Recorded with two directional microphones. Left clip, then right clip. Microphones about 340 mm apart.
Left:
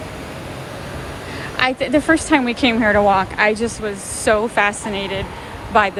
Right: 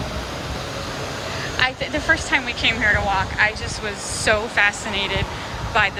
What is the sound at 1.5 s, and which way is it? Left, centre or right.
Speech, centre.